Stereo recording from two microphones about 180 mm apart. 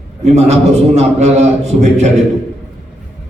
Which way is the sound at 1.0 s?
40° right (ahead or behind).